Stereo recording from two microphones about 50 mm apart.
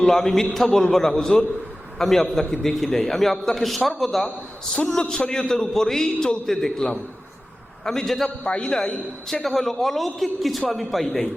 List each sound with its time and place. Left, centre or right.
0.0 s a man's voice: centre
8.4 s a man's voice: centre